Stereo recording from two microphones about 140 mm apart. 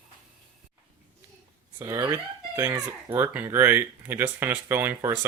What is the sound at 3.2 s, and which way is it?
Speech, 15° right (ahead or behind).